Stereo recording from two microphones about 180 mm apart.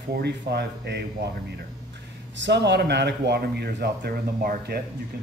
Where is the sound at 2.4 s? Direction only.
70° right (ahead or behind).